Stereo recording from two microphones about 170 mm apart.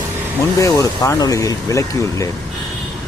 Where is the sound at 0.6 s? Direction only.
20° left (ahead or behind).